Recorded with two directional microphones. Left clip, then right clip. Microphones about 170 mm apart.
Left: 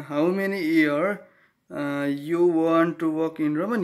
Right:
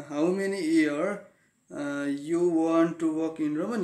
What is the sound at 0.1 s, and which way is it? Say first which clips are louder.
Mantra: left 4 dB; 30° left (ahead or behind).